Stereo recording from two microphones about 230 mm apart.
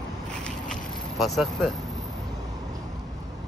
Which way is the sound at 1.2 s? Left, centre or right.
Centre.